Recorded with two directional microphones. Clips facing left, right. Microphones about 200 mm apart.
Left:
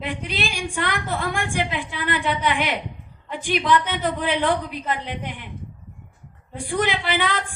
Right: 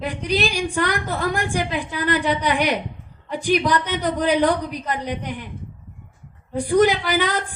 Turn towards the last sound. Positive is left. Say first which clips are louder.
# right 3 dB
turn(degrees=-40)  # may be behind; listen again after turning